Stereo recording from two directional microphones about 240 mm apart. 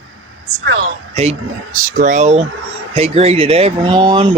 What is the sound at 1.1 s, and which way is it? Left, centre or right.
Speech, right.